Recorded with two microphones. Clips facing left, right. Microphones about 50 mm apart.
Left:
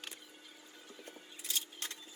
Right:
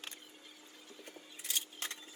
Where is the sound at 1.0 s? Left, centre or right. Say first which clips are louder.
Right 1 dB; right.